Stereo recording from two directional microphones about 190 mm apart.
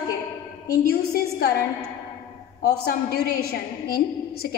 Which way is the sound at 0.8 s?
55° left (ahead or behind).